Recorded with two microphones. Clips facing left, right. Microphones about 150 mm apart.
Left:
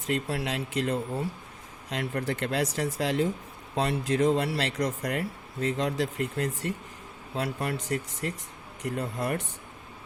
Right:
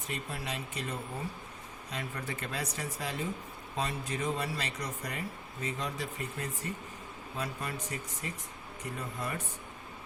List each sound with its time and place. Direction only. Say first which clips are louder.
0.1 s speech: left 9 dB; 90° left
1.9 s speech: left 9 dB; 75° left (ahead or behind)
8.8 s speech: left 8 dB; 75° left (ahead or behind)